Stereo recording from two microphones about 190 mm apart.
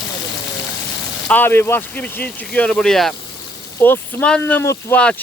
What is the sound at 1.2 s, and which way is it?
Speech, 10° left (ahead or behind).